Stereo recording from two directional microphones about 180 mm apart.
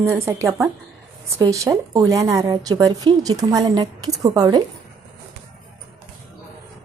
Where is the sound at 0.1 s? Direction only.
15° right (ahead or behind).